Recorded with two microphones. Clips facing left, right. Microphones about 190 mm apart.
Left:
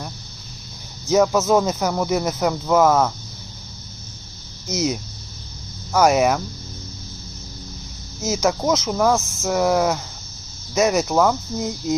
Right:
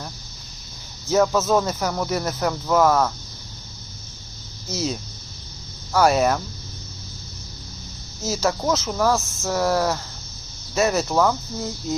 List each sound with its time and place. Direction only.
1.0 s speech: 15° left (ahead or behind)
4.7 s speech: 20° left (ahead or behind)
8.2 s speech: 20° left (ahead or behind)